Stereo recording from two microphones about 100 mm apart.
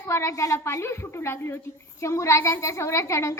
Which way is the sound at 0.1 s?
30° left (ahead or behind).